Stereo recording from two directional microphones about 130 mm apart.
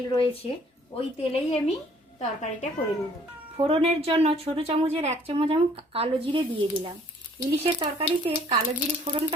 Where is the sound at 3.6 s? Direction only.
50° right (ahead or behind).